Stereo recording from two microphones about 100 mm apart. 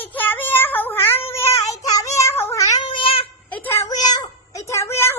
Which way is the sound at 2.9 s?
65° left (ahead or behind).